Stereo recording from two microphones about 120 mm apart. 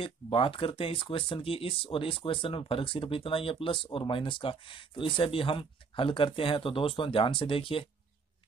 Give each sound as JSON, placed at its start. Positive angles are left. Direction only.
{"t": 0.0, "sound": "speech", "side_deg": 50}